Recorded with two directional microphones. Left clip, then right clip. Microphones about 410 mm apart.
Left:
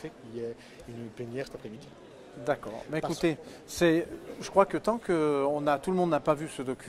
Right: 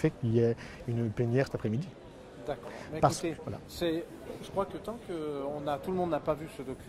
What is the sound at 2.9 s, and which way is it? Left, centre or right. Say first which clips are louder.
Speech: right 1 dB; left.